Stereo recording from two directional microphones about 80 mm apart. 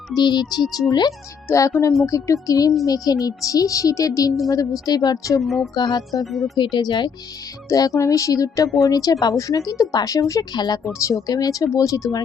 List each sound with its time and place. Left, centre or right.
0.1 s speech: left
0.6 s music: centre
0.9 s speech: left
1.7 s speech: left
5.4 s music: centre
5.7 s speech: left
6.6 s speech: left
7.7 s speech: left
10.9 s speech: left